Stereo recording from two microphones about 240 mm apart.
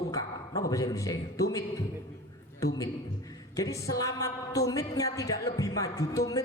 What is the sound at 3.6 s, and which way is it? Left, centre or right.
A woman's voice, centre.